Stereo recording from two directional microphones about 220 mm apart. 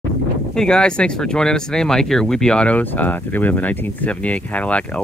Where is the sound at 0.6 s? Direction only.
5° left (ahead or behind).